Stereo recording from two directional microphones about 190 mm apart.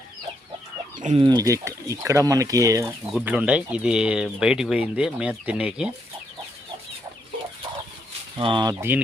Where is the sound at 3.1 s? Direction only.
5° right (ahead or behind).